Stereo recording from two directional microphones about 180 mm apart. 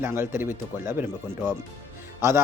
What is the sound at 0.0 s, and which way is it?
Speech, 10° right (ahead or behind).